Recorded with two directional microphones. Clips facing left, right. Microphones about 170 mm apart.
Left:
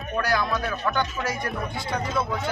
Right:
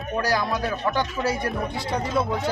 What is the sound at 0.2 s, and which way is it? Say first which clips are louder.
A man's voice: right 1 dB; 35° right (ahead or behind).